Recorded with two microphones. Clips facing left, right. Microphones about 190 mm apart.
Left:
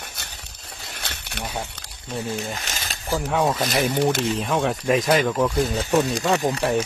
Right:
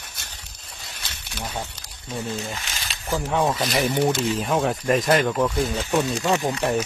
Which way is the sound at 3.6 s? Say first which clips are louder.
Left 1 dB; 45° left (ahead or behind).